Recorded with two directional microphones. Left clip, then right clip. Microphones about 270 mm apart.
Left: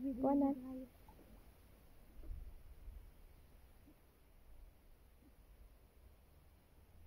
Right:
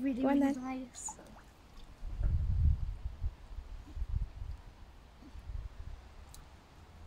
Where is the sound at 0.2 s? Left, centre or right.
Centre.